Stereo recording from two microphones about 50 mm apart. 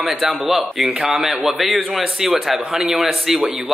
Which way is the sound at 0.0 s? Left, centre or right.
Centre.